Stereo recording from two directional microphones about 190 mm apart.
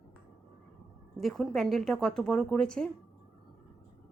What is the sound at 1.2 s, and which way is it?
Speech, centre (ahead or behind).